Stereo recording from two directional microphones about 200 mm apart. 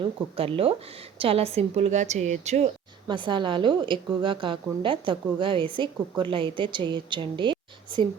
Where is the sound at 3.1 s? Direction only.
25° right (ahead or behind).